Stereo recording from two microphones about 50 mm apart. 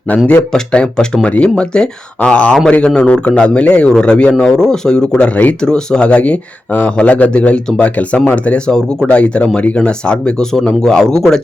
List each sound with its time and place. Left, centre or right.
0.5 s a man's voice: centre